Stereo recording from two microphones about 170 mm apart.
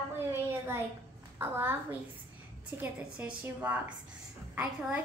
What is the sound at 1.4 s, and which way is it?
A woman's voice, 15° right (ahead or behind).